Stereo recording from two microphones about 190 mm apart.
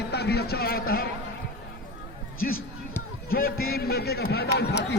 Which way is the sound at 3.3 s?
50° left (ahead or behind).